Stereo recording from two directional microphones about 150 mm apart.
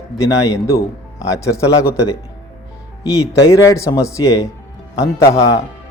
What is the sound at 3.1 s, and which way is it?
A man's voice, 20° left (ahead or behind).